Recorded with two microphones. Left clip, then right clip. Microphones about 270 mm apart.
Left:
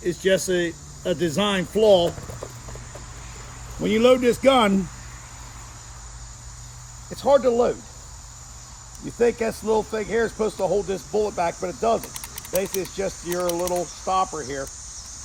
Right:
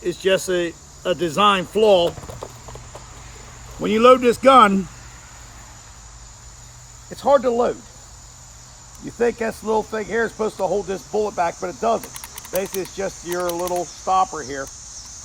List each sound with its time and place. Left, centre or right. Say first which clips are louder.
0.0 s speech: right 2 dB; right
2.4 s a sound: right 2 dB; right
3.8 s speech: right 4 dB; right
7.1 s speech: right 1 dB; centre
9.0 s speech: even; centre